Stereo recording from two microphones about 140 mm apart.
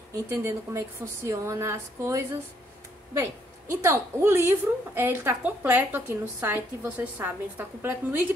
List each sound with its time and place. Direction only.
0.4 s a woman's voice: 20° right (ahead or behind)
3.7 s a woman's voice: 20° right (ahead or behind)